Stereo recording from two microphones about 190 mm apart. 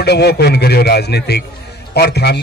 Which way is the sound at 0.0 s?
60° left (ahead or behind).